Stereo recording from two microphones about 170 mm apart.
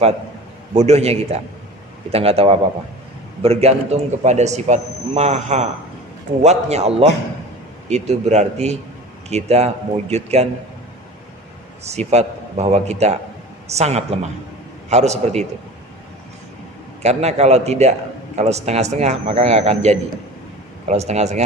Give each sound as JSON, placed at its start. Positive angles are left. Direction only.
{"t": 0.7, "sound": "a man's voice", "side_deg": -40}
{"t": 11.9, "sound": "a man's voice", "side_deg": -40}
{"t": 17.0, "sound": "a man's voice", "side_deg": -40}